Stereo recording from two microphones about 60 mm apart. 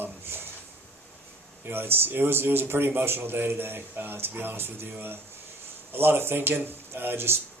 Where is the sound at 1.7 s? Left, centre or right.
Right.